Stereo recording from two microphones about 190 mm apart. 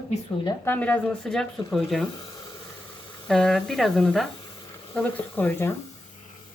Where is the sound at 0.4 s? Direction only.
10° left (ahead or behind).